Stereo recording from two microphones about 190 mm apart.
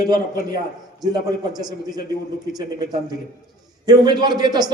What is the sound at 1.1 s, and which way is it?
Speech, 20° right (ahead or behind).